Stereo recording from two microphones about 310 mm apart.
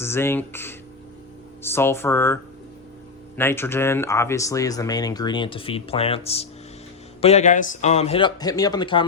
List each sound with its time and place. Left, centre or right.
0.0 s a man's voice: centre